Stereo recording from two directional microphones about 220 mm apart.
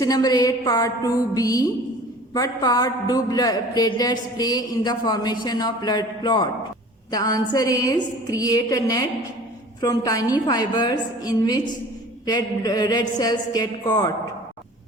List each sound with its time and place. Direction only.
0.0 s a man's voice: 15° left (ahead or behind)